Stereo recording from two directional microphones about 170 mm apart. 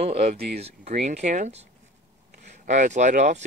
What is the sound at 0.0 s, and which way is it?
Speech, 40° right (ahead or behind).